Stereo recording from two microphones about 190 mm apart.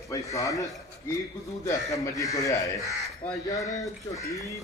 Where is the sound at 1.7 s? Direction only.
15° left (ahead or behind).